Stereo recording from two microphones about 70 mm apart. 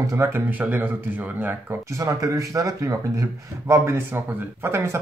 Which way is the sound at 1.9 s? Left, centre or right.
Right.